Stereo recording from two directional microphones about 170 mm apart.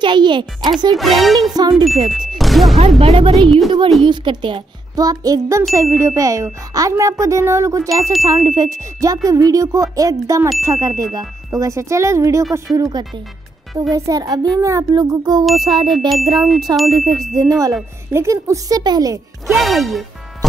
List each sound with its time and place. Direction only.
0.0 s speech: 30° right (ahead or behind)
0.9 s speech: centre (ahead or behind)
1.6 s speech: 25° right (ahead or behind)
2.0 s music: centre (ahead or behind)
3.0 s a woman's voice: 35° right (ahead or behind)
3.4 s speech: centre (ahead or behind)
4.0 s speech: 30° right (ahead or behind)
15.4 s speech: centre (ahead or behind)
17.4 s speech: 20° right (ahead or behind)
19.4 s speech: centre (ahead or behind)